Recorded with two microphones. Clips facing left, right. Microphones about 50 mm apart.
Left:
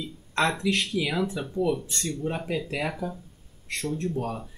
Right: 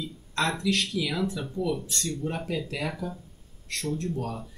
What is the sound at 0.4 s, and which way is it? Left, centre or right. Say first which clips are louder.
Speech: left 2 dB; left.